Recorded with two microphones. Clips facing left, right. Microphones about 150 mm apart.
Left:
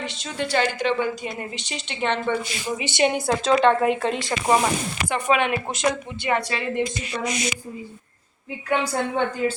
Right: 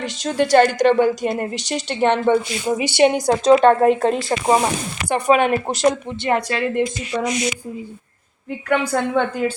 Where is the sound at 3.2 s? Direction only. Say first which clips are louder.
Right 6 dB; 40° right (ahead or behind).